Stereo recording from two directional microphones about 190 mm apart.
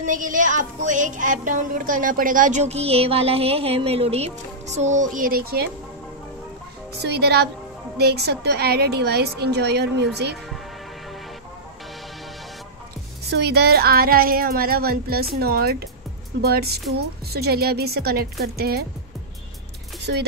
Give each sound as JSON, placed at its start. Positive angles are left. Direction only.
{"t": 0.0, "sound": "speech", "side_deg": -45}
{"t": 7.0, "sound": "a woman's voice", "side_deg": -60}
{"t": 13.3, "sound": "a woman's voice", "side_deg": -60}